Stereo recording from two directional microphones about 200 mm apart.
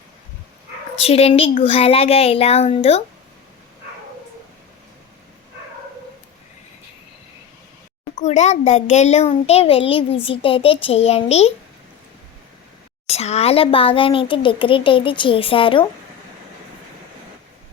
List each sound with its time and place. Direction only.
0.9 s a child's voice: 30° left (ahead or behind)
8.2 s a child's voice: 35° left (ahead or behind)
13.1 s a child's voice: 30° left (ahead or behind)